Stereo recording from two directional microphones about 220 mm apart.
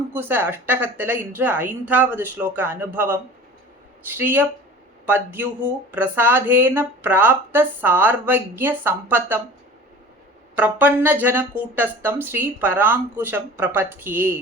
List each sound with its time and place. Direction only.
0.1 s speech: 10° right (ahead or behind)
4.2 s speech: 10° right (ahead or behind)
10.5 s speech: 5° right (ahead or behind)